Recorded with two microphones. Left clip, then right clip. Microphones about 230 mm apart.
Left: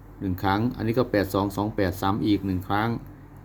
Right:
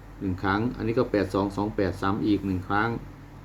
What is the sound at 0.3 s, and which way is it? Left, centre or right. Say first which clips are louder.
Speech: left 2 dB; left.